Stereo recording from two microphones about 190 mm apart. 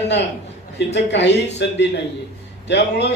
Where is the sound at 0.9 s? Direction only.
65° left (ahead or behind).